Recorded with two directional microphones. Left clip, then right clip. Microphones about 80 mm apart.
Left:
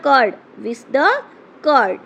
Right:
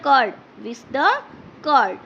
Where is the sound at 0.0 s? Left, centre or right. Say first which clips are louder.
Left 3 dB; left.